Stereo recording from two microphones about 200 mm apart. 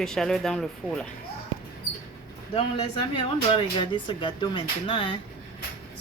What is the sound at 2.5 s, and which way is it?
Speech, 25° left (ahead or behind).